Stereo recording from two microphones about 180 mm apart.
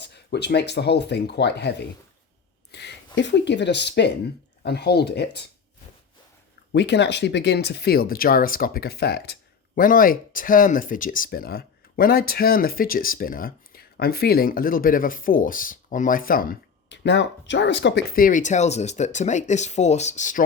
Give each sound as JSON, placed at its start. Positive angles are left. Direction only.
{"t": 0.0, "sound": "speech", "side_deg": 70}
{"t": 2.7, "sound": "speech", "side_deg": 75}
{"t": 6.7, "sound": "speech", "side_deg": 75}
{"t": 16.9, "sound": "speech", "side_deg": 75}
{"t": 18.1, "sound": "speech", "side_deg": 50}